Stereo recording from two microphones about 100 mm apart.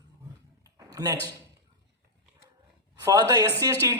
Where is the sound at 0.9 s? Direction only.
40° right (ahead or behind).